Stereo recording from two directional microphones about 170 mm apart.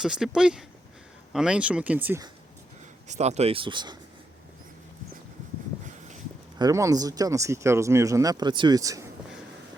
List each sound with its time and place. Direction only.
0.0 s speech: 5° right (ahead or behind)
3.1 s speech: 40° right (ahead or behind)
6.6 s speech: 20° right (ahead or behind)